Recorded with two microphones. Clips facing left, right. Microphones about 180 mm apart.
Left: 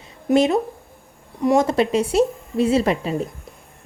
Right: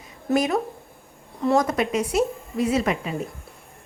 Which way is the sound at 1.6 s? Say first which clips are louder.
Left 4 dB; 30° left (ahead or behind).